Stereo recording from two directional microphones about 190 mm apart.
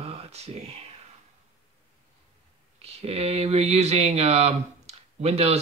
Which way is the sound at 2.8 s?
30° right (ahead or behind).